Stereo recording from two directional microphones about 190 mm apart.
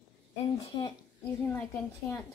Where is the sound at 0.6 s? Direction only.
25° left (ahead or behind).